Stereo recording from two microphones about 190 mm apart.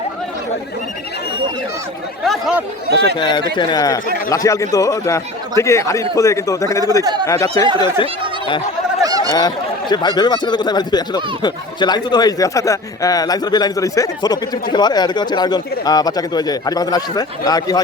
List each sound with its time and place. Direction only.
2.2 s speech: centre (ahead or behind)
3.2 s a man's voice: 25° left (ahead or behind)
7.0 s speech: 20° right (ahead or behind)
7.3 s a man's voice: 15° left (ahead or behind)
9.0 s fowl: 20° right (ahead or behind)
9.9 s speech: 20° left (ahead or behind)